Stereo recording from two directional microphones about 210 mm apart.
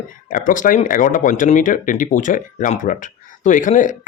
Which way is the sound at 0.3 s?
40° left (ahead or behind).